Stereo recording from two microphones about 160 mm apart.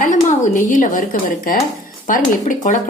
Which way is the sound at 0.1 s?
50° left (ahead or behind).